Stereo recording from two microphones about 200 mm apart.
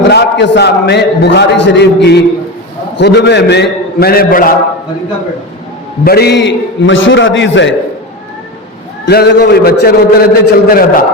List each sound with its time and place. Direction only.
0.1 s a man's voice: 60° left (ahead or behind)
6.1 s a man's voice: 55° left (ahead or behind)
9.0 s a man's voice: 55° left (ahead or behind)